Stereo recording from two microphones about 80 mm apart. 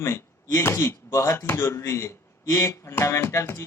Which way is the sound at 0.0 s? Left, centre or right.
Left.